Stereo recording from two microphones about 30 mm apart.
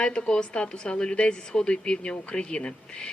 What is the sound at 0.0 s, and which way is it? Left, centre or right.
Speech, left.